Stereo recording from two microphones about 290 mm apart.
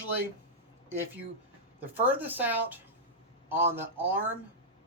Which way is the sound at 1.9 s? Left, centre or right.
Centre.